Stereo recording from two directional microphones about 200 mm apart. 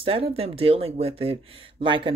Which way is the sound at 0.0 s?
30° right (ahead or behind).